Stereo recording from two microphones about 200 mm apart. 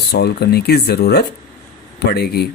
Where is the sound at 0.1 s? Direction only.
55° left (ahead or behind).